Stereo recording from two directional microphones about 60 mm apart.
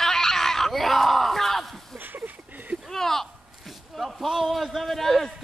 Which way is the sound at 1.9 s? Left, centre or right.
Right.